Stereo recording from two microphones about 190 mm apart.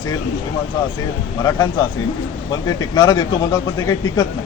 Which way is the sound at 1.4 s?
20° left (ahead or behind).